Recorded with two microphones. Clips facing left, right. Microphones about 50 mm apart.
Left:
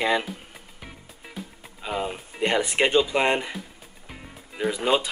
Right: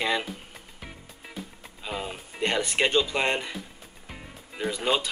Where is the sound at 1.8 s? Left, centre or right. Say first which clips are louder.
Left 5 dB; centre.